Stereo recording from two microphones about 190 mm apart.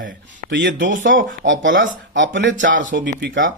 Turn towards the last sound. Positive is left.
turn(degrees=-80)